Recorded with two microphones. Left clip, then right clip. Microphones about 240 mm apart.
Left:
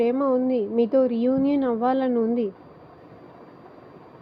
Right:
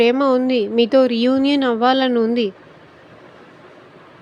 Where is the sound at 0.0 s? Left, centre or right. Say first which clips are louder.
Right 7 dB; right.